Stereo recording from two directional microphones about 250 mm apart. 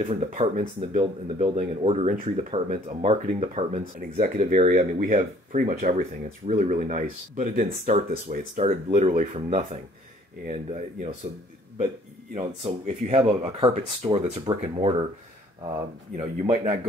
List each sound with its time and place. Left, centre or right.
0.0 s speech: right
12.4 s speech: right
16.2 s speech: right